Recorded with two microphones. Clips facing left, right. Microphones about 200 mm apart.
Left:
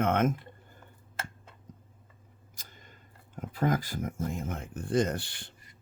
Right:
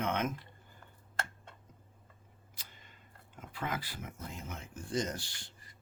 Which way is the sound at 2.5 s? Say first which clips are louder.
Left 4 dB; 45° left (ahead or behind).